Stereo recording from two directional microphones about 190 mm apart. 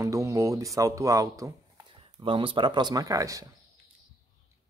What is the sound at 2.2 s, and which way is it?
Speech, 25° right (ahead or behind).